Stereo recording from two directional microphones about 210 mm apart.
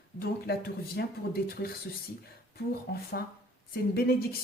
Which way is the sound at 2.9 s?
50° left (ahead or behind).